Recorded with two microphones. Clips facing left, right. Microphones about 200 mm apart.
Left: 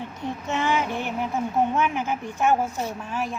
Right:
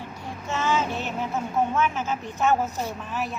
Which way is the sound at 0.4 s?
15° left (ahead or behind).